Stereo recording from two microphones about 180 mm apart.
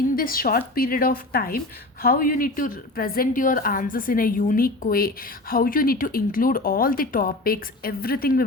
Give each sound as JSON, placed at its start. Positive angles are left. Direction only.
{"t": 0.2, "sound": "a woman's voice", "side_deg": 55}